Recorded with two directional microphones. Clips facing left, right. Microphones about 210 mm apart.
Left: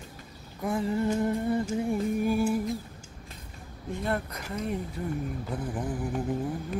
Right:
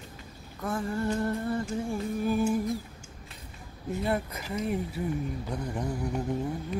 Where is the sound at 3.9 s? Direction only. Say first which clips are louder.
Right 1 dB; 5° right (ahead or behind).